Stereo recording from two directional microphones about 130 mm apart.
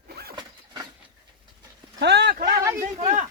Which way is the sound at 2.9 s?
55° right (ahead or behind).